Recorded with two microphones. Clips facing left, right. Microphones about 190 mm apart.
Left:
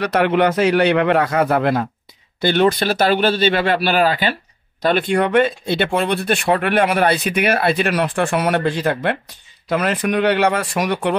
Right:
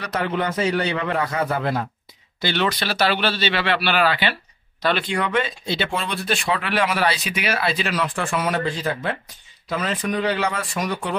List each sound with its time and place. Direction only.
0.0 s speech: 70° left (ahead or behind)
2.4 s speech: 50° left (ahead or behind); by 11.1 s 70° left (ahead or behind)